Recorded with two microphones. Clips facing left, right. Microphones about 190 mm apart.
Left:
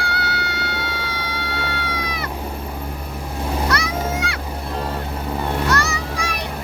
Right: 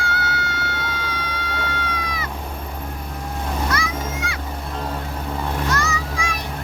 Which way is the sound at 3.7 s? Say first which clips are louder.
Left 3 dB; 70° left (ahead or behind).